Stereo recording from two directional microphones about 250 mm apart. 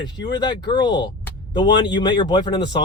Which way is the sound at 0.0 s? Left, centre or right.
Centre.